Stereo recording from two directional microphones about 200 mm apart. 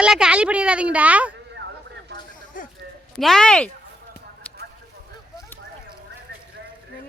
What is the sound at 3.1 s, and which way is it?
Speech, centre (ahead or behind).